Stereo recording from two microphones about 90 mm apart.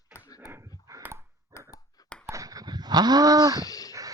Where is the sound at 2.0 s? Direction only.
45° left (ahead or behind).